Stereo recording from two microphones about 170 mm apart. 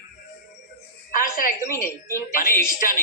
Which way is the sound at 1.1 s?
55° left (ahead or behind).